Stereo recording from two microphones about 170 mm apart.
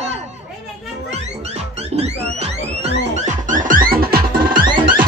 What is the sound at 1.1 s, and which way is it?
Music, 40° right (ahead or behind).